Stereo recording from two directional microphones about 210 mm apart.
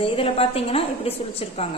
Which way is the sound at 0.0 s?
25° left (ahead or behind).